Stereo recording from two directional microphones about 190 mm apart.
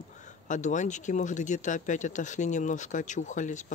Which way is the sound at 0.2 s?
40° left (ahead or behind).